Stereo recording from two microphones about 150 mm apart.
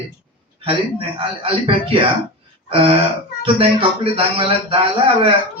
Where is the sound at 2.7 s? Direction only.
40° right (ahead or behind).